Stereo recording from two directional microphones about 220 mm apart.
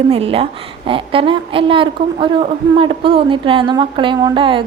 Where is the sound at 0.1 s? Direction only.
25° right (ahead or behind).